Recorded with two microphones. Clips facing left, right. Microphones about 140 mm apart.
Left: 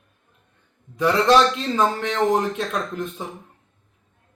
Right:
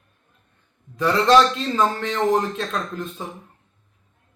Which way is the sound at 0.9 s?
15° left (ahead or behind).